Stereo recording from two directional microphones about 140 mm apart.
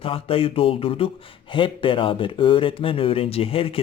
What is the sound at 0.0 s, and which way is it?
Speech, 40° left (ahead or behind).